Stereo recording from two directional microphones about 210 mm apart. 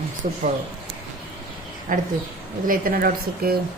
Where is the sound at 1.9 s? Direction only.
40° right (ahead or behind).